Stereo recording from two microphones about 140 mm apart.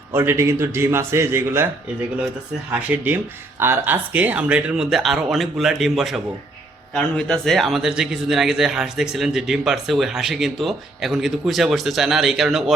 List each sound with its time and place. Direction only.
0.1 s a man's voice: 15° right (ahead or behind)
2.9 s a man's voice: 15° right (ahead or behind)